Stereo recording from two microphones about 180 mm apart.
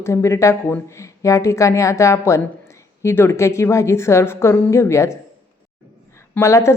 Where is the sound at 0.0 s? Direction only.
15° left (ahead or behind).